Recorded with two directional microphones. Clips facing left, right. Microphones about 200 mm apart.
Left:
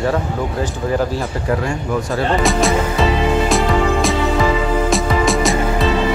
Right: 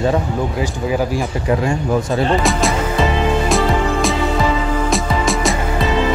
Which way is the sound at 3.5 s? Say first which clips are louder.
Left 1 dB; centre (ahead or behind).